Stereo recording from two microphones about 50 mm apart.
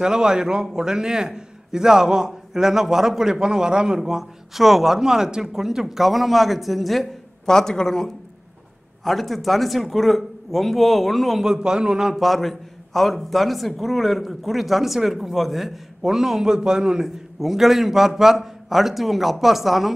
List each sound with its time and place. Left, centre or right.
0.0 s a man's voice: centre
11.4 s a man's voice: centre
12.2 s a man's voice: centre